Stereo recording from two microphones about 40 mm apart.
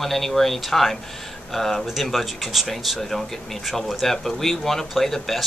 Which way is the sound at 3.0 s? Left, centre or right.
Centre.